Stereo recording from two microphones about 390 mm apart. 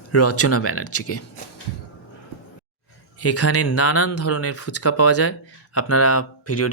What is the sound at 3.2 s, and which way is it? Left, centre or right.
Speech, left.